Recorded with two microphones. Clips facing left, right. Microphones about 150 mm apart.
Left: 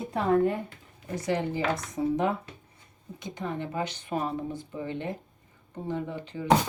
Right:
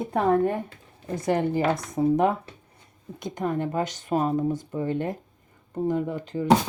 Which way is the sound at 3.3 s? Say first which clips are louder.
Right 6 dB; 50° right (ahead or behind).